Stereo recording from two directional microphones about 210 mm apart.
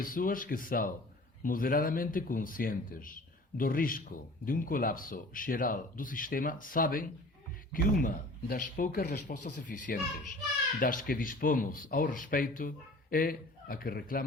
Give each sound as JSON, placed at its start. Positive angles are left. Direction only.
{"t": 0.0, "sound": "speech", "side_deg": 40}